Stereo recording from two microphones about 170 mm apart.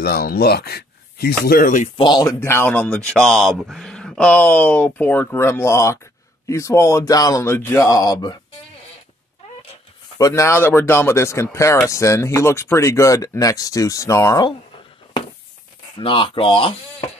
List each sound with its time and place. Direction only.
0.0 s speech: 65° left (ahead or behind)
2.0 s speech: 25° left (ahead or behind)
10.1 s speech: 20° left (ahead or behind)
16.0 s speech: 30° left (ahead or behind)